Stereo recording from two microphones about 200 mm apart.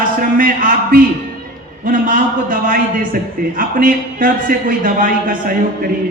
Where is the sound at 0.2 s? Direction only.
45° right (ahead or behind).